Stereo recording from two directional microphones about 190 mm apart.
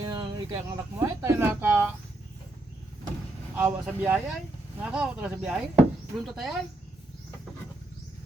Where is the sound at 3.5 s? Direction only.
10° right (ahead or behind).